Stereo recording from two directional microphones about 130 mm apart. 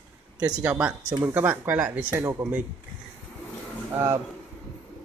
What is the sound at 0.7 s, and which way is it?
Speech, 10° right (ahead or behind).